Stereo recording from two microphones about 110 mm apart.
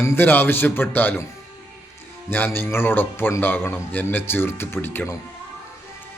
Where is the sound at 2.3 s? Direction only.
20° left (ahead or behind).